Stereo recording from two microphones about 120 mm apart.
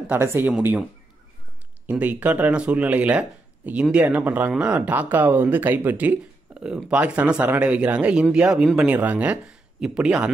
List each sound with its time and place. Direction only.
0.1 s speech: 20° right (ahead or behind)
1.9 s speech: 15° right (ahead or behind)